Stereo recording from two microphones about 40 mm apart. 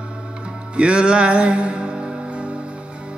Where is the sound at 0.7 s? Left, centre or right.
Right.